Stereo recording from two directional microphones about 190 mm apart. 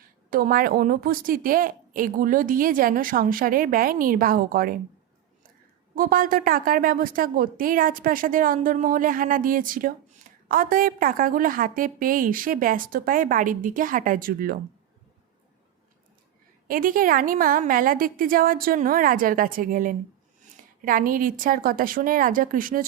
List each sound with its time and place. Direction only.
0.3 s a woman's voice: 45° right (ahead or behind)
6.0 s a woman's voice: 50° right (ahead or behind)
16.6 s a woman's voice: 45° right (ahead or behind)